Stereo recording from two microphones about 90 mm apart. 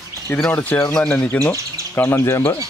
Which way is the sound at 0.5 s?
20° left (ahead or behind).